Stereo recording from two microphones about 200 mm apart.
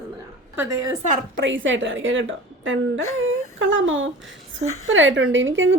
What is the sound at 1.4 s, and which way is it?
A woman's voice, 70° right (ahead or behind).